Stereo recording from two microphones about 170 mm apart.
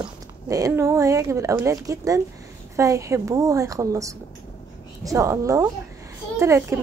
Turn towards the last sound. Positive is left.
turn(degrees=-15)  # may be behind; listen again after turning